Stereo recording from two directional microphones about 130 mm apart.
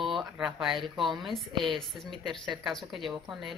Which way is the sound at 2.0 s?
35° right (ahead or behind).